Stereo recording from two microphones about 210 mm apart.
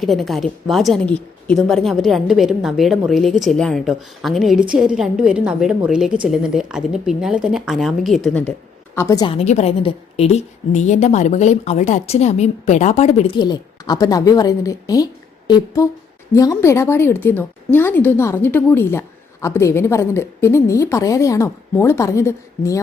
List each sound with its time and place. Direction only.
0.0 s a woman's voice: centre (ahead or behind)
9.0 s a woman's voice: 15° left (ahead or behind)